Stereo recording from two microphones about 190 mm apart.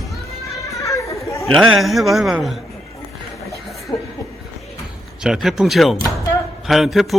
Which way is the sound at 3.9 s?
15° left (ahead or behind).